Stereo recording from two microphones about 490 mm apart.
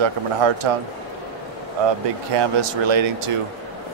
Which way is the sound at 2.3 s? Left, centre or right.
Right.